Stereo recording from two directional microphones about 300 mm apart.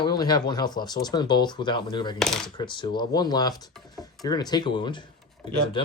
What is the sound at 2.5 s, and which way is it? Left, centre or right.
Speech, centre.